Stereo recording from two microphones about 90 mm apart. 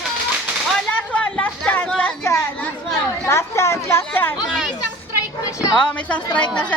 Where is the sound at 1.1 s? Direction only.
10° left (ahead or behind).